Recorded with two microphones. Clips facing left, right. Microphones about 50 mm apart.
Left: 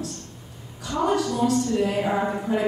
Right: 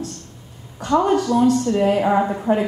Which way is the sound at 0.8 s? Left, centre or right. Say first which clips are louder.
Right 6 dB; right.